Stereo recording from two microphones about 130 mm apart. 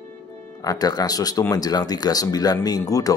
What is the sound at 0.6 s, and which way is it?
Speech, 30° left (ahead or behind).